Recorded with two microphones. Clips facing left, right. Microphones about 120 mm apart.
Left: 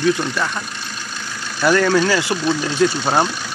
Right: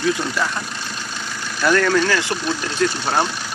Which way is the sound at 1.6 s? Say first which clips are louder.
Left 2 dB; 10° left (ahead or behind).